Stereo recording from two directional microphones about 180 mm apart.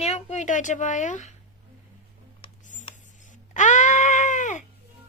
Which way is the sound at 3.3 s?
45° left (ahead or behind).